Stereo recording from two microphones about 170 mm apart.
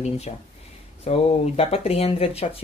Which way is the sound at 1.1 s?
35° left (ahead or behind).